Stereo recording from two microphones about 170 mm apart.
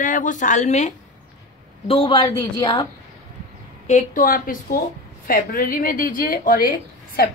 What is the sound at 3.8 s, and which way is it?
A woman's voice, 50° left (ahead or behind).